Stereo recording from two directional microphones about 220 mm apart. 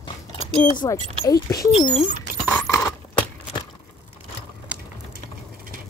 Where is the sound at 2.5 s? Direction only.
10° left (ahead or behind).